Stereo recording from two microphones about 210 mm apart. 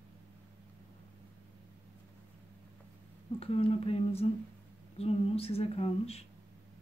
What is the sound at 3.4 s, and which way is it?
Speech, 25° left (ahead or behind).